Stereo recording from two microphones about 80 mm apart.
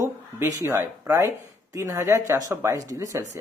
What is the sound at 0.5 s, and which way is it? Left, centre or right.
Speech, right.